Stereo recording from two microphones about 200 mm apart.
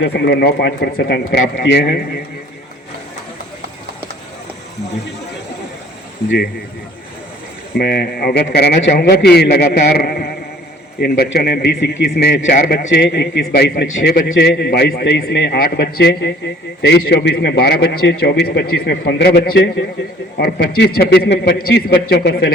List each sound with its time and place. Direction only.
0.0 s a man's voice: 55° left (ahead or behind)
7.8 s a man's voice: 50° left (ahead or behind)